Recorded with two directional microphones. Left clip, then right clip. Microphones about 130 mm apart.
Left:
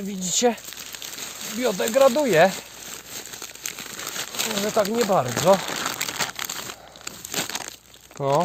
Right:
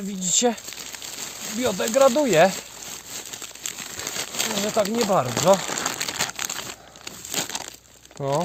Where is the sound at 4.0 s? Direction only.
Centre (ahead or behind).